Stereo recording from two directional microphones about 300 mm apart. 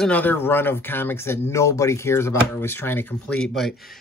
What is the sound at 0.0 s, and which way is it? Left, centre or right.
Speech, centre.